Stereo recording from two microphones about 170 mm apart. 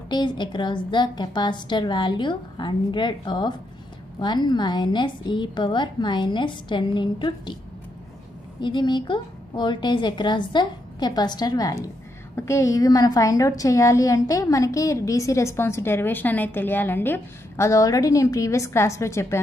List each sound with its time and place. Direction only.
0.1 s a woman's voice: 25° left (ahead or behind)
8.5 s a woman's voice: 25° left (ahead or behind)